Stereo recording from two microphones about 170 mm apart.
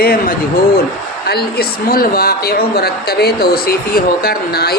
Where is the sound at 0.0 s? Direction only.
60° left (ahead or behind).